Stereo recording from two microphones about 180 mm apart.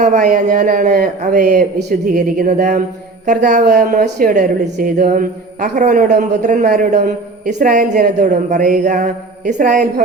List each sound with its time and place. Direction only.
0.2 s a woman's voice: 50° right (ahead or behind)